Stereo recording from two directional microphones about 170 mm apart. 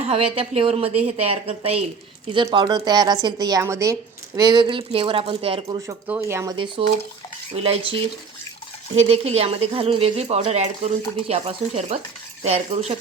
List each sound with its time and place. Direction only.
0.3 s speech: 35° right (ahead or behind)
6.1 s speech: 10° right (ahead or behind); by 13.0 s 35° right (ahead or behind)